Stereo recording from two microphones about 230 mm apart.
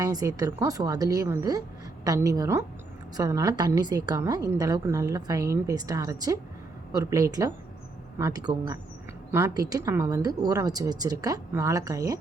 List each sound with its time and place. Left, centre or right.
0.0 s a woman's voice: centre